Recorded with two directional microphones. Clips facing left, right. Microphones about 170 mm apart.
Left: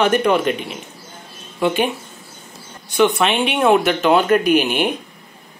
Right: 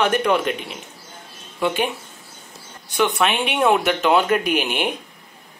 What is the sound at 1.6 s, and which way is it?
Speech, 5° left (ahead or behind).